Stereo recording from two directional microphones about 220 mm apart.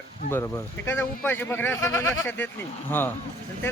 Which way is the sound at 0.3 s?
10° left (ahead or behind).